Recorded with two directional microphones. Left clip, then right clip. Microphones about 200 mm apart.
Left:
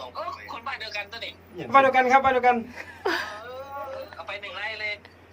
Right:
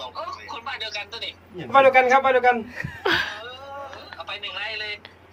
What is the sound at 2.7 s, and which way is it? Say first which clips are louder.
Speech: right 5 dB; 10° right (ahead or behind).